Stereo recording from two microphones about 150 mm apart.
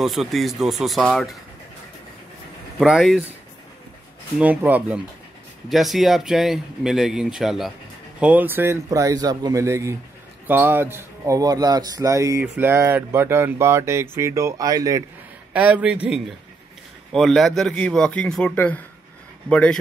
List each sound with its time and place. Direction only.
0.0 s speech: centre (ahead or behind)
2.8 s speech: centre (ahead or behind)
4.4 s speech: 10° right (ahead or behind)
15.5 s speech: 10° right (ahead or behind); by 19.8 s 5° left (ahead or behind)